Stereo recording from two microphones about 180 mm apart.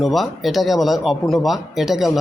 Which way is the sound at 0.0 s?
Centre (ahead or behind).